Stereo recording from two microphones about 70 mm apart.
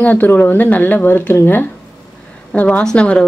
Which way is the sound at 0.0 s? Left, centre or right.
Left.